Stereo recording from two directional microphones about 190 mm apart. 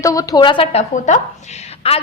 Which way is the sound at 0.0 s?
15° left (ahead or behind).